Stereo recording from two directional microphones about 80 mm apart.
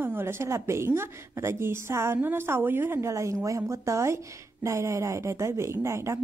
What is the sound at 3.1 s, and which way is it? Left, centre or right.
A woman's voice, right.